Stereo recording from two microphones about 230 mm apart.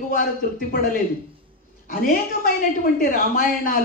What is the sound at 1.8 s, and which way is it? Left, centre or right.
Speech, left.